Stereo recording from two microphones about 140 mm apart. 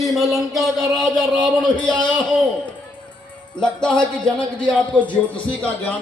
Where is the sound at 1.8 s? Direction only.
30° left (ahead or behind).